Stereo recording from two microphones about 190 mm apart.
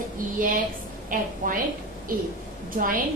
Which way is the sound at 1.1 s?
45° right (ahead or behind).